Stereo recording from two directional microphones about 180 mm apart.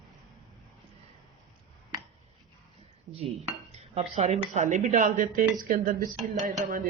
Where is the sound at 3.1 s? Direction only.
35° right (ahead or behind).